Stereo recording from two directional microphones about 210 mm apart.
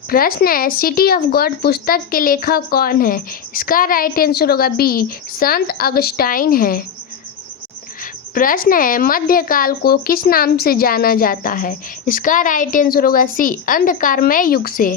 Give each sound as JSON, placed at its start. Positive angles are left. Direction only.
{"t": 0.1, "sound": "speech", "side_deg": 45}
{"t": 8.4, "sound": "speech", "side_deg": 40}